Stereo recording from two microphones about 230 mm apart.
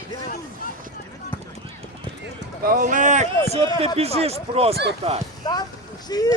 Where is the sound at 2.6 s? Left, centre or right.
Right.